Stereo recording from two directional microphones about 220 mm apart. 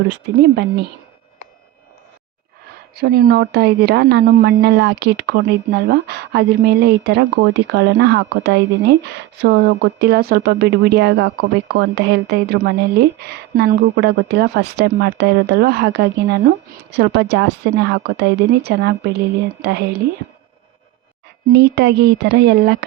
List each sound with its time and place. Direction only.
0.1 s speech: 50° right (ahead or behind)
2.9 s speech: 45° right (ahead or behind)
21.5 s speech: 50° right (ahead or behind)